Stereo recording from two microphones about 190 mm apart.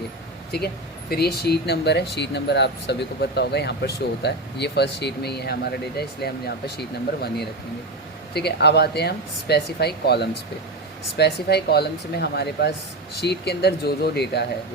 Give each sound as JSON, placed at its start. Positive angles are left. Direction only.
{"t": 1.1, "sound": "speech", "side_deg": 55}